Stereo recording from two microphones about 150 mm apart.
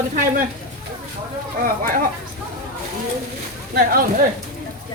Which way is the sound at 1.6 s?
70° right (ahead or behind).